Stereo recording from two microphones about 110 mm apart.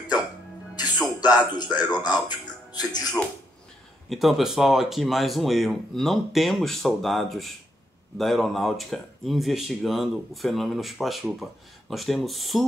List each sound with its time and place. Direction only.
0.7 s music: 40° left (ahead or behind)
1.2 s speech: 40° left (ahead or behind)
4.1 s speech: centre (ahead or behind)